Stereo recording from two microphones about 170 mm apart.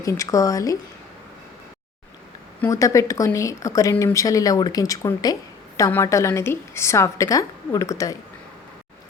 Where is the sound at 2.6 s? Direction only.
20° left (ahead or behind).